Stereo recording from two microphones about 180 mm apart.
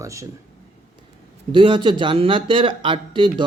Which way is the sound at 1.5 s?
25° right (ahead or behind).